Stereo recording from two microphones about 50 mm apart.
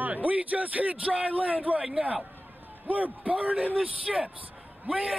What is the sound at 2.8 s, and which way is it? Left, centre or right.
A man's voice, right.